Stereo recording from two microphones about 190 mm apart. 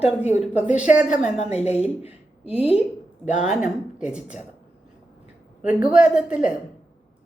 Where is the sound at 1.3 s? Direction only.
35° left (ahead or behind).